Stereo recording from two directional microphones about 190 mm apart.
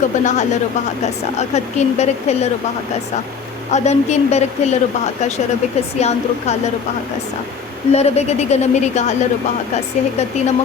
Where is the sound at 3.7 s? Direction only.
35° left (ahead or behind).